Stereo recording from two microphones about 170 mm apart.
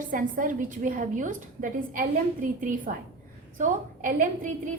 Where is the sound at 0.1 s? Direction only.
50° right (ahead or behind).